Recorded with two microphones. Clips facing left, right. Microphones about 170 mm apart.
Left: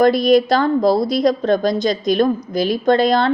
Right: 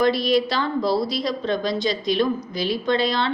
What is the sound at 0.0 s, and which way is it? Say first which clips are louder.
Speech: left 6 dB; 45° left (ahead or behind).